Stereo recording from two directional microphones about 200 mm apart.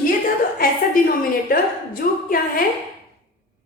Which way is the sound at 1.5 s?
45° left (ahead or behind).